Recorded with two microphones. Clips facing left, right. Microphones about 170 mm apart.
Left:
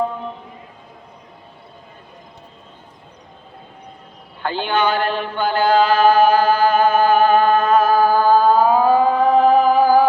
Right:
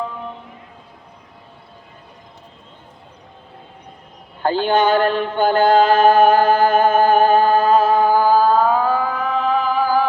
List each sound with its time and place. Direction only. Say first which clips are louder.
4.4 s mantra: right 3 dB; 45° right (ahead or behind); by 8.4 s 10° right (ahead or behind)
8.5 s music: left 3 dB; 10° left (ahead or behind); by 10.1 s 45° left (ahead or behind)